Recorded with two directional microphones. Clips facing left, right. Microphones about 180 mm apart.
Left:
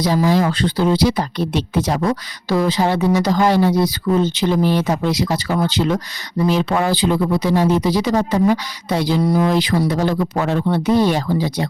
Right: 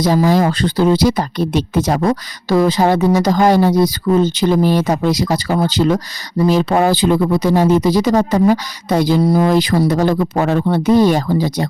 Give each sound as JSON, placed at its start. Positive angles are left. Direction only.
{"t": 0.0, "sound": "speech", "side_deg": -45}